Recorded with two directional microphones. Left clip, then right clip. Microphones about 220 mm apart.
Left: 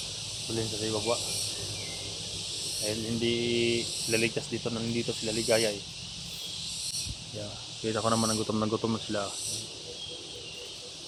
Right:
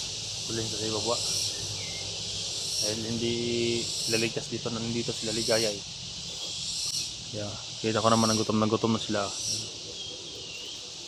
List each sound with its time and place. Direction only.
0.9 s speech: centre (ahead or behind)
2.8 s speech: 5° left (ahead or behind)
7.9 s speech: 30° right (ahead or behind)